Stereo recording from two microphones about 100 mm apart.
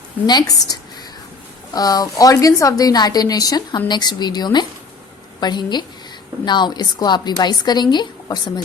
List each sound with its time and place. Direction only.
0.3 s a woman's voice: 40° left (ahead or behind)